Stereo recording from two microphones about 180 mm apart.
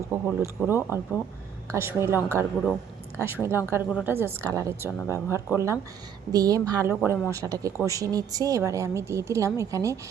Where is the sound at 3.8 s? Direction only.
5° right (ahead or behind).